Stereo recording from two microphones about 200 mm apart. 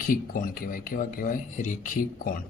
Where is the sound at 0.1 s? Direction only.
45° left (ahead or behind).